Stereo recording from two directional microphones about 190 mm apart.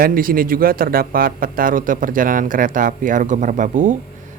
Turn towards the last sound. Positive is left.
turn(degrees=-40)  # may be behind; listen again after turning